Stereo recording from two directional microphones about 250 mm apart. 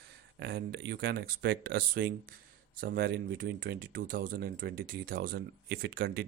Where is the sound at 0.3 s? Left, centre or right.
Right.